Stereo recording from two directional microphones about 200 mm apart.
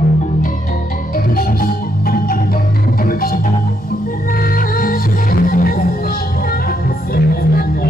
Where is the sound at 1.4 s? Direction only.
45° left (ahead or behind).